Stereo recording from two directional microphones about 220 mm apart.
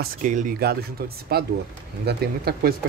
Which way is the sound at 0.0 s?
35° right (ahead or behind).